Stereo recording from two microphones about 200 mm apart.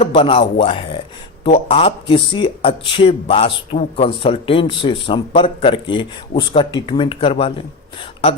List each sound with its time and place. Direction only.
0.0 s a man's voice: 25° left (ahead or behind)